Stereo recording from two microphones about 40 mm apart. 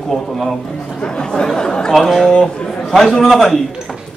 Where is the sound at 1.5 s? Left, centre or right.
Centre.